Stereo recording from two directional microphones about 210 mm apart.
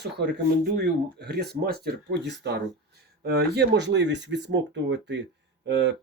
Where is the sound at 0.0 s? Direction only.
50° right (ahead or behind).